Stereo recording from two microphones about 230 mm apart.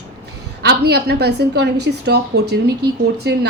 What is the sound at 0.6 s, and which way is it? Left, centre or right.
A woman's voice, right.